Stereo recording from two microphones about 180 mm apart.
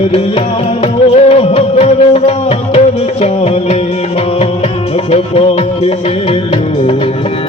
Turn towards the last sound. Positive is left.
turn(degrees=35)  # may be behind; listen again after turning